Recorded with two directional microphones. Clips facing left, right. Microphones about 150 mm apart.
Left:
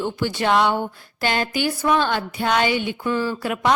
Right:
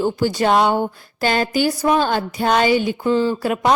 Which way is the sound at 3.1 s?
25° right (ahead or behind).